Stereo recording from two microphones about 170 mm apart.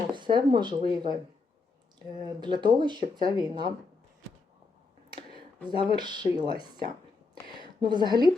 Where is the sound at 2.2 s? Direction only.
25° right (ahead or behind).